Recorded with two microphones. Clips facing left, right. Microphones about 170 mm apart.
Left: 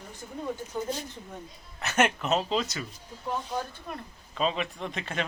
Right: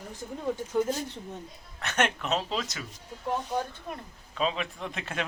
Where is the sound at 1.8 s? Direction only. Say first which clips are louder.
Left 3 dB; 5° left (ahead or behind).